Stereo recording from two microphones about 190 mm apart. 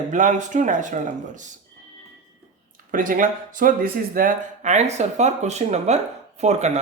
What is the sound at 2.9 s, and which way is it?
Speech, 45° right (ahead or behind).